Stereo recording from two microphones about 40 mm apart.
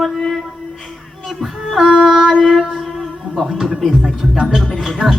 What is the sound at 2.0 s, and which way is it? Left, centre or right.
Music, centre.